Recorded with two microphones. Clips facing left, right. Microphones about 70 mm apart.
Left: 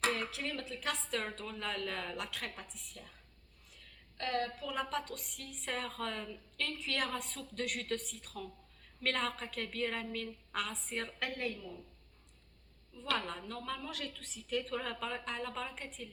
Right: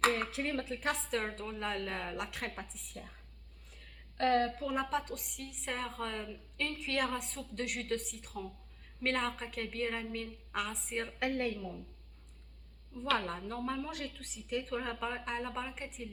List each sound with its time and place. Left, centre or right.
0.0 s speech: right
4.2 s speech: right
4.7 s a woman's voice: centre
13.1 s a woman's voice: right